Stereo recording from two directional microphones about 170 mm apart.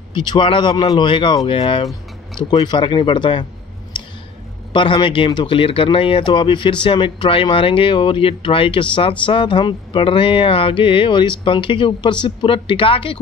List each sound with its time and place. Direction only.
0.1 s speech: 25° left (ahead or behind)
3.9 s a sound: 25° left (ahead or behind)
4.7 s speech: 30° left (ahead or behind)